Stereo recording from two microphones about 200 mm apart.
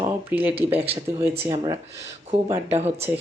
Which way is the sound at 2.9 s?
10° right (ahead or behind).